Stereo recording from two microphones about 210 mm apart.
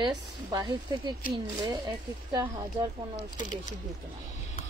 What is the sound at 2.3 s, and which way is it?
Speech, 20° right (ahead or behind).